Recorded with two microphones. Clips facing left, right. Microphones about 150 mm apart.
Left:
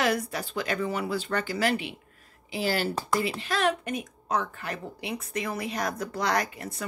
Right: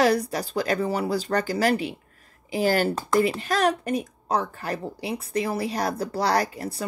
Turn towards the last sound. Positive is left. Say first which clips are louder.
# right 4 dB
turn(degrees=-35)  # may be behind; listen again after turning